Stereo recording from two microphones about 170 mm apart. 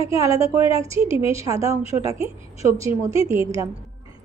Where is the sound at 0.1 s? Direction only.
20° right (ahead or behind).